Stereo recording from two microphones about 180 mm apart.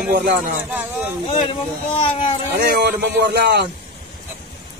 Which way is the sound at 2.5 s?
60° right (ahead or behind).